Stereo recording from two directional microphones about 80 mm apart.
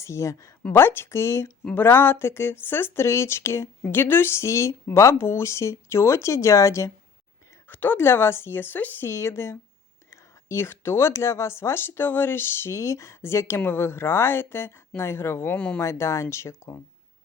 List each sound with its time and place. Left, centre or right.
0.0 s speech: left
0.7 s speech: left
7.7 s speech: left
15.5 s speech: centre
15.8 s speech: left